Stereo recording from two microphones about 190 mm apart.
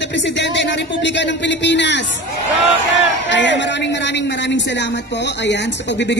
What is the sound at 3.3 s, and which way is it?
A man's voice, 70° left (ahead or behind).